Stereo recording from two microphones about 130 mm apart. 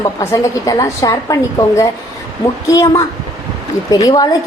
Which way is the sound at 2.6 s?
25° left (ahead or behind).